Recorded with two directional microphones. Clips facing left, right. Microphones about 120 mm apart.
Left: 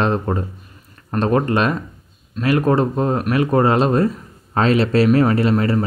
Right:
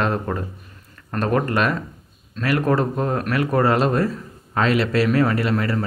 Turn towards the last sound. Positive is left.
turn(degrees=25)  # may be behind; listen again after turning